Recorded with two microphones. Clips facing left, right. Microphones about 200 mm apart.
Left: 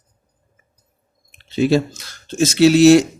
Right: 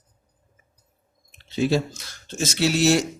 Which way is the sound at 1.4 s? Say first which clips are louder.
Left 6 dB; 75° left (ahead or behind).